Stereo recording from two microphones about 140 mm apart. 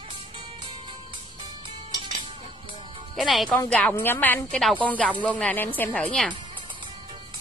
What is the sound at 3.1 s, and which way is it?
Speech, centre (ahead or behind).